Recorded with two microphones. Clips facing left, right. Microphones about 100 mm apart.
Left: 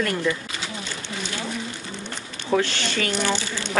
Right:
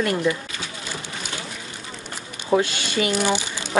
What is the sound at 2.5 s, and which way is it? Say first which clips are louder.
Speech: right 2 dB; 10° right (ahead or behind).